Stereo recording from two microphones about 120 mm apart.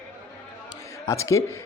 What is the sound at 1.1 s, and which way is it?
Speech, 25° left (ahead or behind).